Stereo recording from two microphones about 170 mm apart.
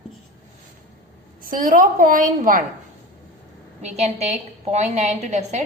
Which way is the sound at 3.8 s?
40° right (ahead or behind).